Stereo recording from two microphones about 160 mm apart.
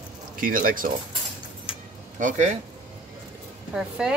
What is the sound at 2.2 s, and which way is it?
Speech, 50° right (ahead or behind).